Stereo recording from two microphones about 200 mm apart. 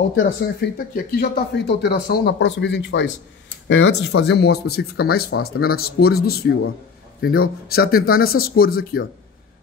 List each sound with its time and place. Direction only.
0.2 s speech: 50° left (ahead or behind)